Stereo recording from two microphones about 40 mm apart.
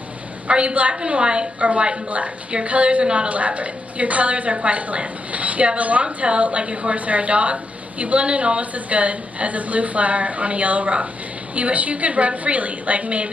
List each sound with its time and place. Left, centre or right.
0.5 s a woman's voice: right